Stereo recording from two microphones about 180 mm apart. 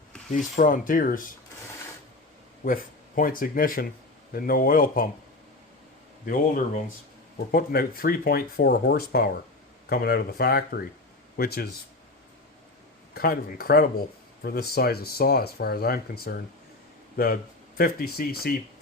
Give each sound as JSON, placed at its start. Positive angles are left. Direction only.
{"t": 0.3, "sound": "speech", "side_deg": 45}
{"t": 3.2, "sound": "speech", "side_deg": 50}
{"t": 6.2, "sound": "speech", "side_deg": 50}
{"t": 13.1, "sound": "speech", "side_deg": 55}